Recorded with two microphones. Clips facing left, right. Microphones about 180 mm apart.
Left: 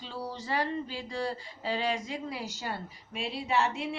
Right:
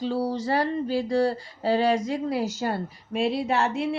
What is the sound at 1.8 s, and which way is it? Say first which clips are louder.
A woman's voice: right 9 dB; 40° right (ahead or behind).